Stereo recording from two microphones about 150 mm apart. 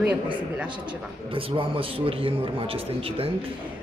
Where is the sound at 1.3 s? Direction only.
35° right (ahead or behind).